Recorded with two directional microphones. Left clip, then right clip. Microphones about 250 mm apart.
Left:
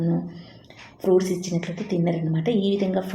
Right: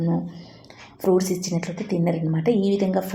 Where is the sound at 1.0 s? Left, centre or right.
Centre.